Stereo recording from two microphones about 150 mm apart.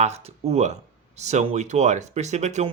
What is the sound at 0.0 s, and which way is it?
Speech, 45° right (ahead or behind).